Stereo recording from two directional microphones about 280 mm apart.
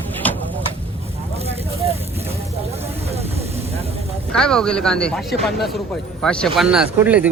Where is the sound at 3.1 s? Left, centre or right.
Right.